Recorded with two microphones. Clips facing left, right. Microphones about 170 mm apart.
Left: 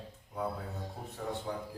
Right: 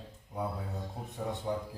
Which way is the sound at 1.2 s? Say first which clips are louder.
Right 2 dB; 20° right (ahead or behind).